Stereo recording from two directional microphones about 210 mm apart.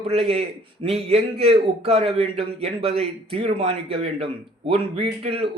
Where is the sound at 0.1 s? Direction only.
30° right (ahead or behind).